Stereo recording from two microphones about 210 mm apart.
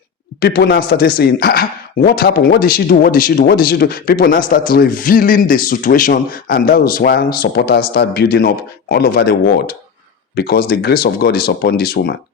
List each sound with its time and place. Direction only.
0.3 s speech: 45° left (ahead or behind)